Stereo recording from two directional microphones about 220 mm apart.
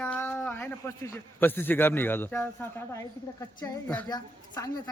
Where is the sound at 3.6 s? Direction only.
5° left (ahead or behind).